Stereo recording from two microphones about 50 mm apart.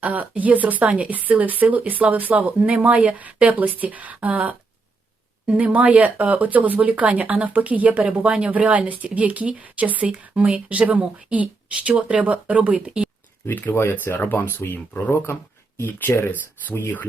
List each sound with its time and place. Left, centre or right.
0.0 s speech: right
13.5 s speech: left